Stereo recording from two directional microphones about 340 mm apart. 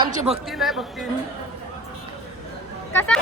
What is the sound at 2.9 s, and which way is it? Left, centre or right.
Speech, centre.